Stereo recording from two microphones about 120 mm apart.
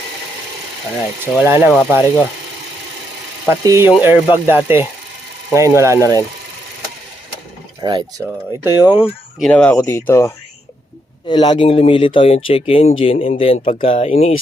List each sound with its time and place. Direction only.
1.2 s speech: 20° right (ahead or behind)
3.6 s speech: 25° right (ahead or behind)
7.8 s speech: 40° right (ahead or behind)
8.2 s speech: 20° right (ahead or behind)
9.5 s speech: 10° left (ahead or behind)
9.7 s speech: 25° left (ahead or behind)
11.3 s speech: 40° left (ahead or behind); by 14.3 s 65° left (ahead or behind)